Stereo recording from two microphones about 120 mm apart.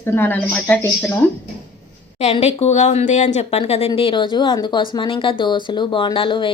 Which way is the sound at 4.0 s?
45° left (ahead or behind).